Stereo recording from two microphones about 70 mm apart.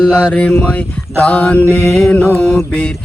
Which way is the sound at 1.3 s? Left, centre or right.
Left.